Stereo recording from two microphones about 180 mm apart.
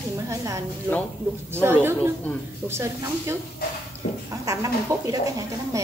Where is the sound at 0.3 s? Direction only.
15° right (ahead or behind).